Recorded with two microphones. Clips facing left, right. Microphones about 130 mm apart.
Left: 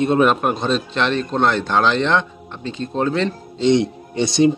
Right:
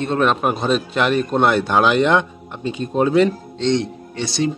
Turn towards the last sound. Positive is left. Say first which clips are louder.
# left 6 dB
turn(degrees=20)  # may be behind; listen again after turning